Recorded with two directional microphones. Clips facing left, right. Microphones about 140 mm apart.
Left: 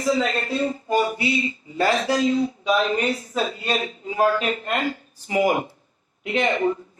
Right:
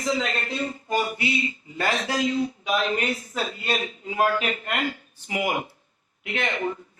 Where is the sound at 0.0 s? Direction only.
40° left (ahead or behind).